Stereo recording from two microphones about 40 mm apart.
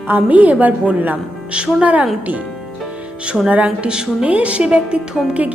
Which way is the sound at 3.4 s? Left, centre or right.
Right.